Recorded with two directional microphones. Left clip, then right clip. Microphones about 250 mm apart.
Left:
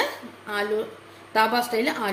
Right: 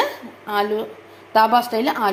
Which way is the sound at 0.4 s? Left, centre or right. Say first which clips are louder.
Right 5 dB; centre.